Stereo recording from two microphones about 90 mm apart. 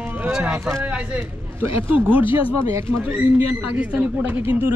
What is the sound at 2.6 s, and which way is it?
Speech, 40° right (ahead or behind).